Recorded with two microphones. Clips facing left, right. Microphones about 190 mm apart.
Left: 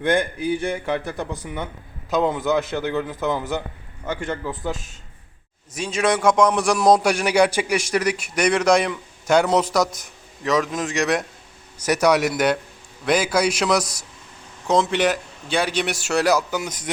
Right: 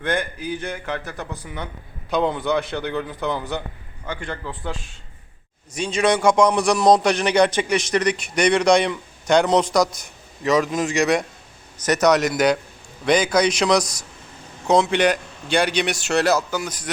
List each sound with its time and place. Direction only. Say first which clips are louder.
0.0 s speech: left 4 dB; 10° left (ahead or behind)
4.7 s a man's voice: left 2 dB; 45° left (ahead or behind)
5.7 s a man's voice: right 2 dB; 5° left (ahead or behind); by 16.9 s 20° left (ahead or behind)